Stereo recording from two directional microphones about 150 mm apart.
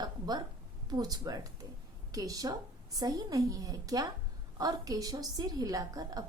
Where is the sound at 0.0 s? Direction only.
25° right (ahead or behind).